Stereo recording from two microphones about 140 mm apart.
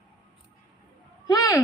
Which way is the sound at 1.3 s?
25° left (ahead or behind).